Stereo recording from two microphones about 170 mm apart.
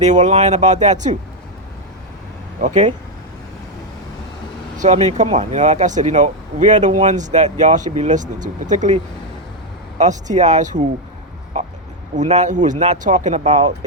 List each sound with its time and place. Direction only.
0.0 s speech: 45° right (ahead or behind)
2.6 s speech: 45° right (ahead or behind)
4.8 s speech: 45° right (ahead or behind)
10.0 s speech: 45° right (ahead or behind)
12.1 s speech: 45° right (ahead or behind)